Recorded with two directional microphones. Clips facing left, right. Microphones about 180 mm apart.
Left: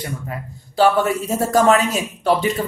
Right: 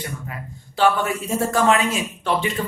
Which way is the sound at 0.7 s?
40° left (ahead or behind).